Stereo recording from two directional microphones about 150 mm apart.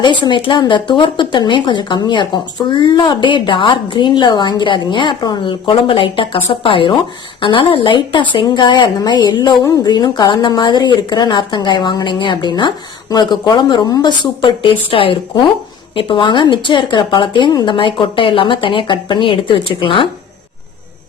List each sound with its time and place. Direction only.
0.0 s speech: 30° left (ahead or behind)